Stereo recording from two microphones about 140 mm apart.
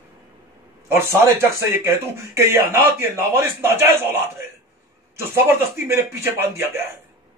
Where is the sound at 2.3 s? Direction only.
20° right (ahead or behind).